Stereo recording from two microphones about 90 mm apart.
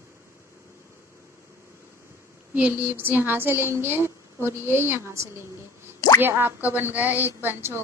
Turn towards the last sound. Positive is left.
turn(degrees=-25)  # may be behind; listen again after turning